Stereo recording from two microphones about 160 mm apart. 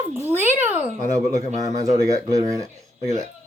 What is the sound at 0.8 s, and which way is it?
Speech, 45° left (ahead or behind).